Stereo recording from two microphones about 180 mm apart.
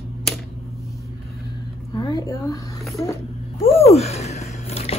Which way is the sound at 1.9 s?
20° left (ahead or behind).